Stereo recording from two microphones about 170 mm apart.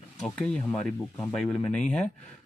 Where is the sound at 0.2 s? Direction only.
5° left (ahead or behind).